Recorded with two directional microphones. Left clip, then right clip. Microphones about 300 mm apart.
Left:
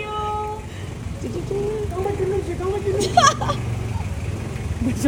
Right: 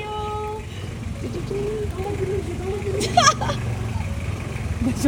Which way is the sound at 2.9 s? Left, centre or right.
Centre.